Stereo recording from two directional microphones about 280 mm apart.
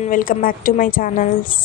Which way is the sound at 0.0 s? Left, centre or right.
Left.